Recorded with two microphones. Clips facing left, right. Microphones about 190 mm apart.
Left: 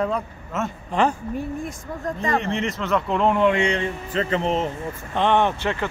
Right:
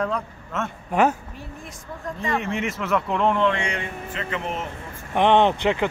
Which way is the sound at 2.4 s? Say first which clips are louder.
Left 1 dB; 5° right (ahead or behind).